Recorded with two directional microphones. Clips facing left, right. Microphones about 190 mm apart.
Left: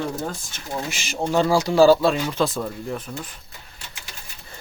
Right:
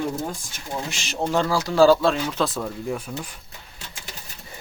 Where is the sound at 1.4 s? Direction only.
15° left (ahead or behind); by 3.2 s 5° right (ahead or behind).